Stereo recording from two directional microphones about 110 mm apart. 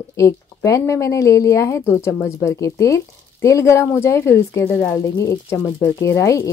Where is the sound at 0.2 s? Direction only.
30° left (ahead or behind).